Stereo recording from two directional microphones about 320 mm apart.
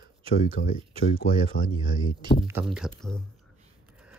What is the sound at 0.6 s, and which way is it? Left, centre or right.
Speech, left.